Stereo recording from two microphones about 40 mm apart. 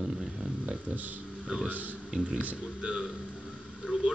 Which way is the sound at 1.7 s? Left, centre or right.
Right.